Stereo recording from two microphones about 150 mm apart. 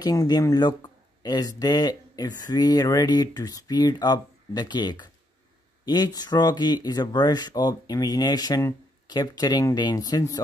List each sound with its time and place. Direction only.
0.0 s speech: 25° left (ahead or behind)